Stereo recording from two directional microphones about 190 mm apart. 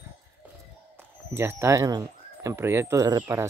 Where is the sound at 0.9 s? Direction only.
15° right (ahead or behind).